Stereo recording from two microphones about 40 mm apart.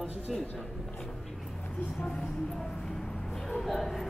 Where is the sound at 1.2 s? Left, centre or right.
Centre.